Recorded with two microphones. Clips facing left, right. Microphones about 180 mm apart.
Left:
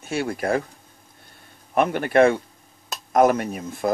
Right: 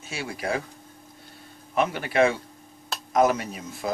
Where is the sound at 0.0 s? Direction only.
55° left (ahead or behind).